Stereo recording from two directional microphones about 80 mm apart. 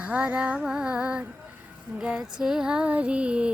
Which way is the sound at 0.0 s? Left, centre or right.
Centre.